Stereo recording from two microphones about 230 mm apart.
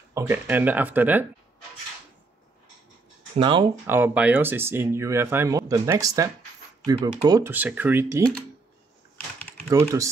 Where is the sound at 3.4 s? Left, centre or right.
Right.